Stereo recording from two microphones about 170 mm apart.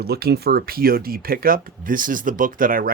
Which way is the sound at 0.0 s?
70° right (ahead or behind).